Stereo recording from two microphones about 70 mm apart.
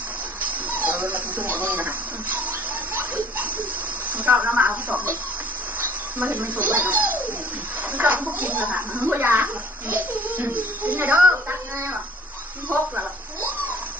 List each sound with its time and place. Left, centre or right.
0.8 s a sound: right
1.6 s speech: right
4.1 s speech: right
6.1 s a child's voice: right
12.7 s a child's voice: right